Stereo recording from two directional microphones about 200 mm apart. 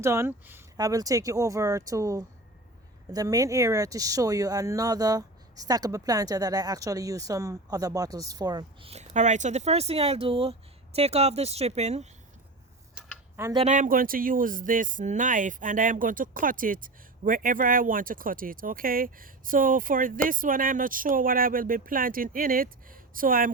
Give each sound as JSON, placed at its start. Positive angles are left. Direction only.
{"t": 0.0, "sound": "speech", "side_deg": -15}
{"t": 12.9, "sound": "a sound", "side_deg": -10}
{"t": 13.5, "sound": "speech", "side_deg": -25}
{"t": 13.7, "sound": "speech", "side_deg": -45}